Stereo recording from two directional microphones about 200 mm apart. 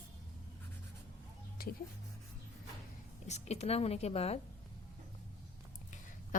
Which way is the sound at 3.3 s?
35° left (ahead or behind).